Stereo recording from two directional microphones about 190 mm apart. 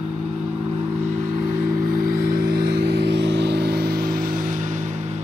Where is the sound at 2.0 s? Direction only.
55° right (ahead or behind).